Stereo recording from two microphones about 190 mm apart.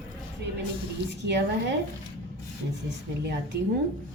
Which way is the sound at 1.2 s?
65° right (ahead or behind).